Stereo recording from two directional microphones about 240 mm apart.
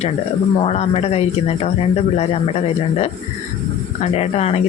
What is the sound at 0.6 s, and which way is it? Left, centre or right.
Speech, left.